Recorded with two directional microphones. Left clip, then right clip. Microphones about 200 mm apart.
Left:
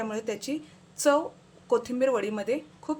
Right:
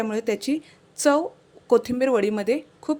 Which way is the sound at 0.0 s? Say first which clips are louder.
Right 7 dB; 35° right (ahead or behind).